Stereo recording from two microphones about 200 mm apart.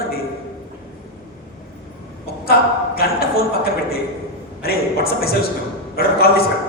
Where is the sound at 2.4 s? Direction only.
50° left (ahead or behind).